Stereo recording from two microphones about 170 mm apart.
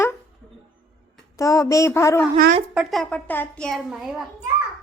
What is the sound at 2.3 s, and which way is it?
Speech, 50° right (ahead or behind).